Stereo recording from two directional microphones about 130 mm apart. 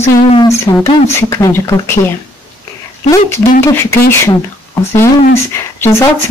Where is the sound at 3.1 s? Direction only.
20° left (ahead or behind).